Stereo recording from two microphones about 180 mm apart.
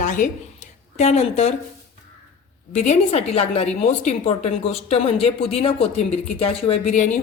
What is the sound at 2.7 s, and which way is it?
Speech, 40° left (ahead or behind).